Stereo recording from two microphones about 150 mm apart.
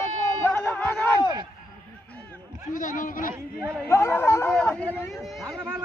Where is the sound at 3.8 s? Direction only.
15° left (ahead or behind); by 5.6 s centre (ahead or behind).